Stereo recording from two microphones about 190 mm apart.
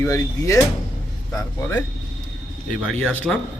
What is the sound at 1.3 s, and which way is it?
Speech, 5° left (ahead or behind).